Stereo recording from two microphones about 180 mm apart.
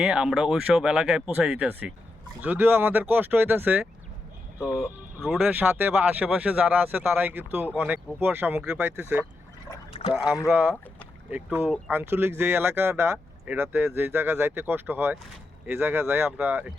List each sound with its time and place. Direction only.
0.0 s speech: 5° right (ahead or behind)
9.9 s speech: 35° left (ahead or behind)
10.3 s speech: 15° left (ahead or behind)
11.3 s speech: 10° right (ahead or behind)